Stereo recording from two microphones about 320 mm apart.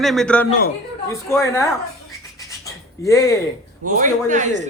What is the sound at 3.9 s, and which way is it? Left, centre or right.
Speech, right.